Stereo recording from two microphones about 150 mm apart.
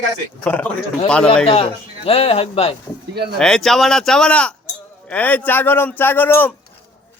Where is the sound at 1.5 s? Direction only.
40° left (ahead or behind).